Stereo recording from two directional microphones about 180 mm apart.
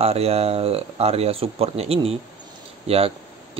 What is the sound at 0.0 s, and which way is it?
Speech, 35° right (ahead or behind).